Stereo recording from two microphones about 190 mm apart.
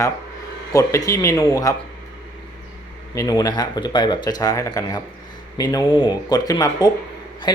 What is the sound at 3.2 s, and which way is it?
Speech, 20° left (ahead or behind).